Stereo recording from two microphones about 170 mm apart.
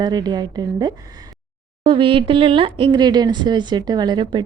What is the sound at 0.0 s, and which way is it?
A woman's voice, 25° right (ahead or behind).